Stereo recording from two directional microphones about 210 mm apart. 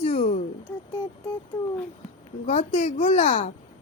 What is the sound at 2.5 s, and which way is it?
Child singing, 35° left (ahead or behind).